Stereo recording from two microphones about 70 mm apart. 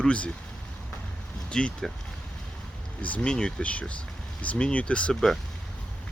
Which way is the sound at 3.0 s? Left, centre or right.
Centre.